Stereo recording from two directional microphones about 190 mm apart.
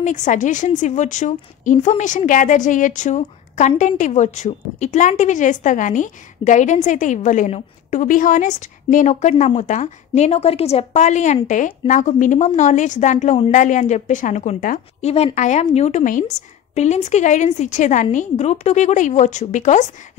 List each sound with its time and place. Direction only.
0.0 s a woman's voice: 40° left (ahead or behind)